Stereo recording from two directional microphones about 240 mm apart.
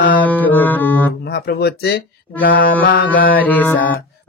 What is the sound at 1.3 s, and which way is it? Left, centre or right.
Speech, left.